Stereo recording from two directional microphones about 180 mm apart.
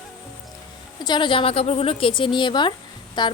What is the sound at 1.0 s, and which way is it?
A woman's voice, 25° left (ahead or behind).